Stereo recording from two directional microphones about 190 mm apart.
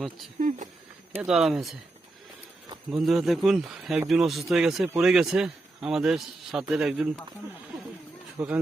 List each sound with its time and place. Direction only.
0.3 s speech: 40° right (ahead or behind)
1.1 s speech: 5° right (ahead or behind)
3.0 s speech: centre (ahead or behind)
8.4 s speech: 5° right (ahead or behind)